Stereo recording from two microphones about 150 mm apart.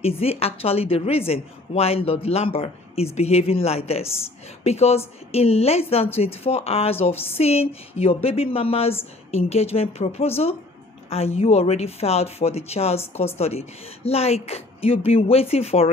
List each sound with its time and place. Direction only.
0.0 s a woman's voice: 40° left (ahead or behind)